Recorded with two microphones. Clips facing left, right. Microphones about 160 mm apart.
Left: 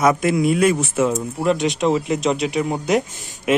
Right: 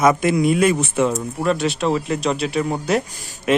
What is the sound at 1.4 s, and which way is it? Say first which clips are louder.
Speech: left 1 dB; 20° left (ahead or behind).